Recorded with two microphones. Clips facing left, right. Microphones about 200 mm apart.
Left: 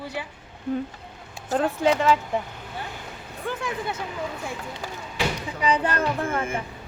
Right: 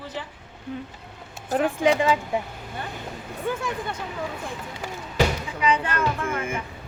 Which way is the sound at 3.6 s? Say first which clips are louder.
Even; 5° left (ahead or behind).